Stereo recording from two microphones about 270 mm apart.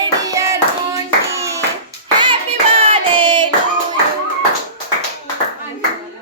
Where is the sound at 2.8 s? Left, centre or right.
Centre.